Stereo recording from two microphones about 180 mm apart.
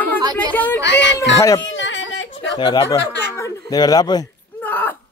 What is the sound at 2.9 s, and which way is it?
Speech, 70° left (ahead or behind).